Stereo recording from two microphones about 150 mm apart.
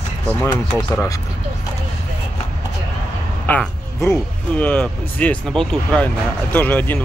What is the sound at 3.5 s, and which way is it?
Speech, 10° left (ahead or behind).